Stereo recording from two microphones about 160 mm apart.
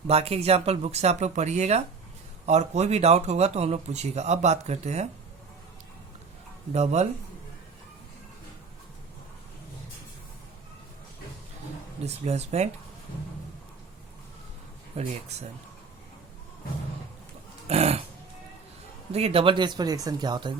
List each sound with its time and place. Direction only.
0.1 s a man's voice: 40° right (ahead or behind)
6.7 s a man's voice: 45° right (ahead or behind)
12.0 s a man's voice: 45° right (ahead or behind)
15.0 s a man's voice: 40° right (ahead or behind)
17.7 s speech: 40° right (ahead or behind)
19.1 s speech: 40° right (ahead or behind)